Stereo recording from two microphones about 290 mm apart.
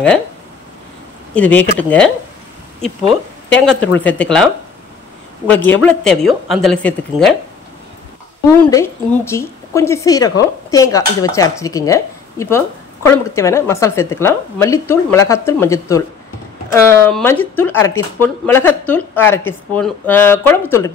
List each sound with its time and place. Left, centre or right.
1.3 s a woman's voice: centre
3.5 s a woman's voice: centre
5.5 s a woman's voice: centre
8.6 s a woman's voice: centre